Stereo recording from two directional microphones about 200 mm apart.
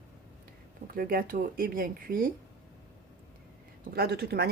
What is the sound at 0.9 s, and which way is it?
Speech, 45° right (ahead or behind).